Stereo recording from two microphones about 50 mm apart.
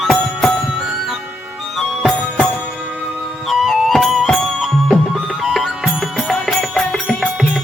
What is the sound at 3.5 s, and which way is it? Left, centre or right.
Music, centre.